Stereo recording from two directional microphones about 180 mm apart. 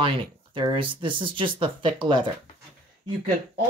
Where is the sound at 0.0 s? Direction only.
30° right (ahead or behind).